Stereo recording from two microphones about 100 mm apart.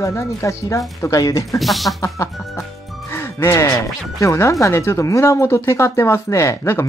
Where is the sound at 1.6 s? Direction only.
Centre (ahead or behind).